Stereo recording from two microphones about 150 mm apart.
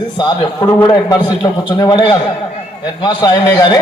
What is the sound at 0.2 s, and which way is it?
A man's voice, 30° left (ahead or behind).